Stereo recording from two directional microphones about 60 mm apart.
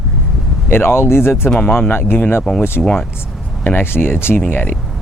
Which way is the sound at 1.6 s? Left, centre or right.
Left.